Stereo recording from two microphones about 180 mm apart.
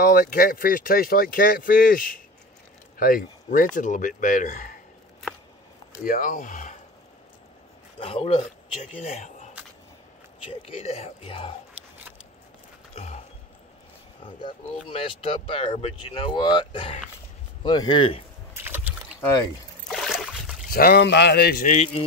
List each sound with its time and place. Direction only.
0.0 s speech: 50° left (ahead or behind)
6.0 s speech: 45° left (ahead or behind)
8.0 s speech: 30° left (ahead or behind)
12.9 s mechanisms: 40° left (ahead or behind)
14.2 s speech: 30° left (ahead or behind)
18.5 s boat: 10° right (ahead or behind)
19.9 s boat: centre (ahead or behind)
20.6 s speech: 55° left (ahead or behind)
21.6 s speech: 35° left (ahead or behind)